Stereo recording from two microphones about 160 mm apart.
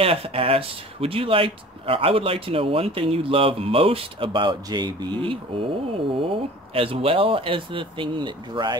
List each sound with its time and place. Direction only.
0.0 s speech: 35° right (ahead or behind)